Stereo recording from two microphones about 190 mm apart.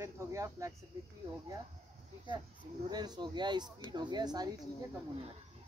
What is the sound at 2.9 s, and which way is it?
Speech, 20° right (ahead or behind).